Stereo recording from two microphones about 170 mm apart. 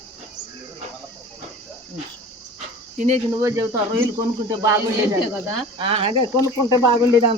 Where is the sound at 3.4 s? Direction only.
15° right (ahead or behind).